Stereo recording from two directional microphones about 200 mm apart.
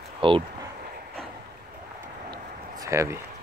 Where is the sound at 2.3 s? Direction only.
15° right (ahead or behind).